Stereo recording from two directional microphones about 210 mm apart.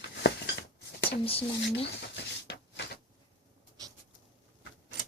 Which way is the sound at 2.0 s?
55° left (ahead or behind).